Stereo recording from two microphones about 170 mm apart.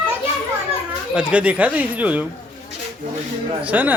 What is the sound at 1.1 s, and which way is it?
A child's voice, 5° right (ahead or behind).